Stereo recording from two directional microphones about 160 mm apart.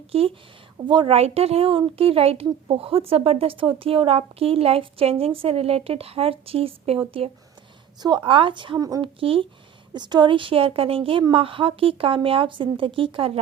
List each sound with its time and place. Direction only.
0.1 s a woman's voice: 35° right (ahead or behind)
8.0 s a woman's voice: 30° right (ahead or behind)